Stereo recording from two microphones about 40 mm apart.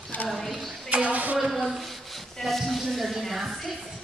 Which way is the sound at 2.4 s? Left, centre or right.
Centre.